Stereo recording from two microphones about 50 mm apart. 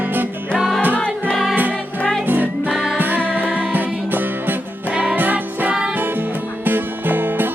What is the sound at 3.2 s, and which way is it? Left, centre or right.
Music, right.